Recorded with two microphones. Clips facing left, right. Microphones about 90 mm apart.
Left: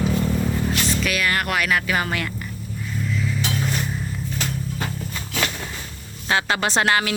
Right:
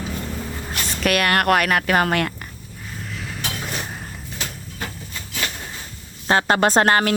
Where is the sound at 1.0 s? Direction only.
55° right (ahead or behind).